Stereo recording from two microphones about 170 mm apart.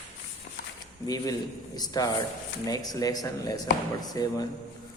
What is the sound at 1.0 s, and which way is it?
Speech, 20° left (ahead or behind).